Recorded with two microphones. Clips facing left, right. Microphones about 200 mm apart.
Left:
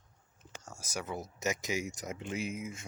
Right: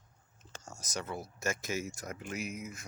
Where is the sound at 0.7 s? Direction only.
10° left (ahead or behind).